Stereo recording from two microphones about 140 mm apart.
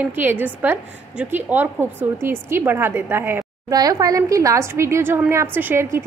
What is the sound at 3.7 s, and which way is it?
A woman's voice, 25° right (ahead or behind).